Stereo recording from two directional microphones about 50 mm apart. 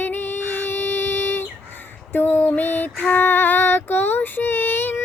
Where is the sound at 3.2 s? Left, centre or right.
Left.